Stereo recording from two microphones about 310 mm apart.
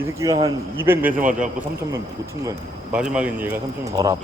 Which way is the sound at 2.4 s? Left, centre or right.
Centre.